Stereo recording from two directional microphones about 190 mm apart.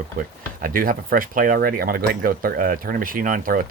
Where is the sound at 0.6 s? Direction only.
50° right (ahead or behind).